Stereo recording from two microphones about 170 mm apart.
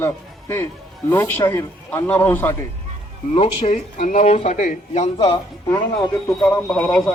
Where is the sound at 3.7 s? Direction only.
50° left (ahead or behind).